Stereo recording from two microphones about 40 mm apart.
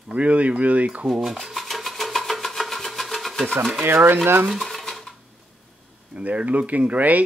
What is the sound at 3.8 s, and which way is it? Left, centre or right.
Speech, right.